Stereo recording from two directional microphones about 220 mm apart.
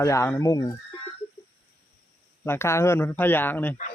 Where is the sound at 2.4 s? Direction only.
10° left (ahead or behind).